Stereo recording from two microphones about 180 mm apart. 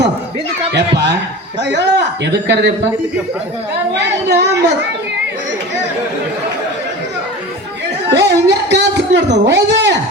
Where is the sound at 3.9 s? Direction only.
70° right (ahead or behind).